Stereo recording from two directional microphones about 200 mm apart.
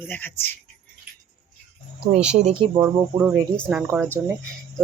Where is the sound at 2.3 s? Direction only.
30° right (ahead or behind).